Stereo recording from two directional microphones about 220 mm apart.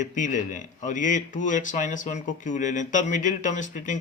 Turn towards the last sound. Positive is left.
turn(degrees=35)  # may be behind; listen again after turning